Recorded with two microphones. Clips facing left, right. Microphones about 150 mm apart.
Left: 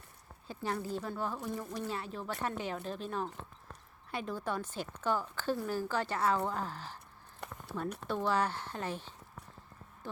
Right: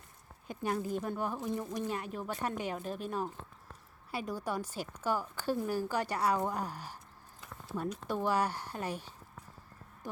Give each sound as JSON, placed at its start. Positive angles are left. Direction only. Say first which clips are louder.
{"t": 0.4, "sound": "speech", "louder": "right 2 dB", "side_deg": -15}
{"t": 7.4, "sound": "a sound", "louder": "left 6 dB", "side_deg": 65}
{"t": 8.0, "sound": "speech", "louder": "even", "side_deg": -10}